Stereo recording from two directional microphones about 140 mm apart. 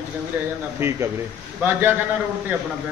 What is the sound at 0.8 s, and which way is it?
Speech, 20° right (ahead or behind).